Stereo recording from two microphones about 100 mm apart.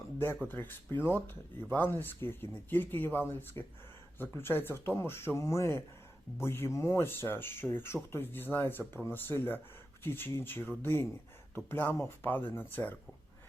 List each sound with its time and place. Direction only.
0.4 s speech: 20° left (ahead or behind)
3.6 s speech: 30° left (ahead or behind)